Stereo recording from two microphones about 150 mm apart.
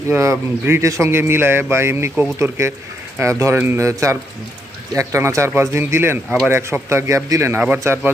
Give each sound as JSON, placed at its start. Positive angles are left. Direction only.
{"t": 0.1, "sound": "speech", "side_deg": -15}